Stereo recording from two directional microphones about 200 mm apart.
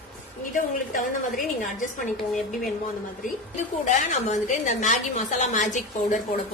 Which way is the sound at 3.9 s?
35° left (ahead or behind).